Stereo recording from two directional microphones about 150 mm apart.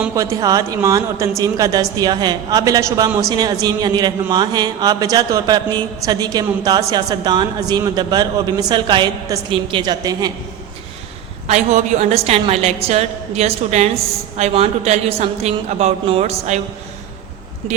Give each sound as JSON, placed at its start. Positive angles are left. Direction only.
{"t": 0.2, "sound": "a woman's voice", "side_deg": -20}
{"t": 11.4, "sound": "a woman's voice", "side_deg": -50}